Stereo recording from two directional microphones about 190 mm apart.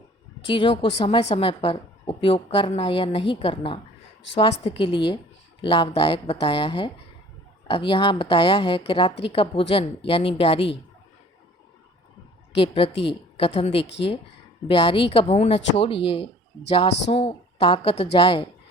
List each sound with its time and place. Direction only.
0.4 s a woman's voice: 25° left (ahead or behind)
12.5 s a woman's voice: 30° left (ahead or behind)